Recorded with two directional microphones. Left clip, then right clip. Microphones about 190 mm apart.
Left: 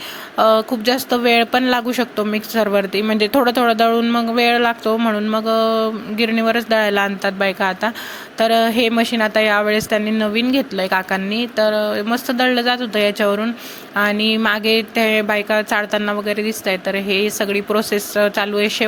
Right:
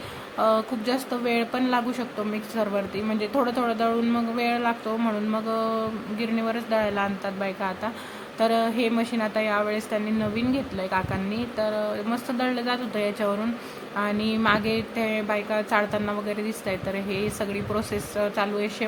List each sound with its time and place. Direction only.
0.3 s a woman's voice: 25° left (ahead or behind)